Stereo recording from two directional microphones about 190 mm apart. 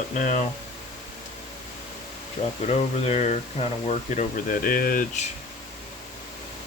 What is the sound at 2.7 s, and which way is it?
Speech, 35° left (ahead or behind).